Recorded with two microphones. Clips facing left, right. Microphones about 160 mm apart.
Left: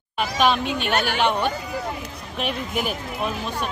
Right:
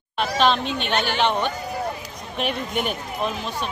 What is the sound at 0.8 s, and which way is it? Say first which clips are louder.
Speech: even; 45° left (ahead or behind).